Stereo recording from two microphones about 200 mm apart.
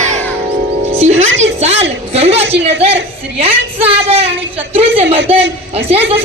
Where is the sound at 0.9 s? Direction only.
30° right (ahead or behind).